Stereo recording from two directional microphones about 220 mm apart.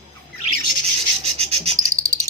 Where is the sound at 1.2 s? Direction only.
30° right (ahead or behind).